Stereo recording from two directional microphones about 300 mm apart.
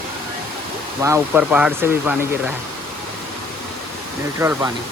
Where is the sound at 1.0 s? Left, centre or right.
Centre.